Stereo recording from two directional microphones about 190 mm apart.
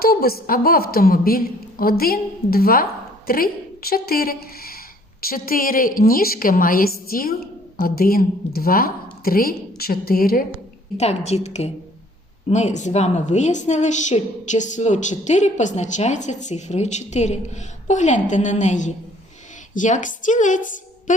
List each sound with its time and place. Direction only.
0.0 s a woman's voice: 50° left (ahead or behind)
10.9 s a woman's voice: 35° left (ahead or behind)